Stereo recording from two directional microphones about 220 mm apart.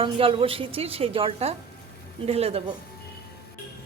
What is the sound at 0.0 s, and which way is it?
A woman's voice, 25° right (ahead or behind).